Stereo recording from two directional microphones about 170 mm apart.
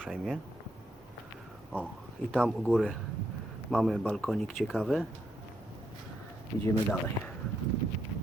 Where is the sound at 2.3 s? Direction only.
Centre (ahead or behind).